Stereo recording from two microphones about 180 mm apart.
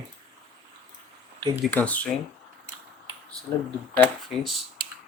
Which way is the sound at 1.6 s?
10° left (ahead or behind).